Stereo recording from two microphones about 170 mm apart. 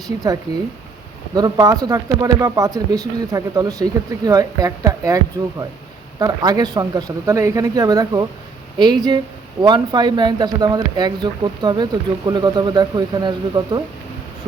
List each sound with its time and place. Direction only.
1.4 s speech: 25° right (ahead or behind)